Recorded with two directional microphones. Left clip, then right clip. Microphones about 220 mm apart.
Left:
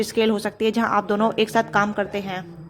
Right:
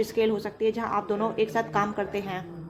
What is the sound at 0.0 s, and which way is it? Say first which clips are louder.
A woman's voice: left 4 dB; 25° left (ahead or behind).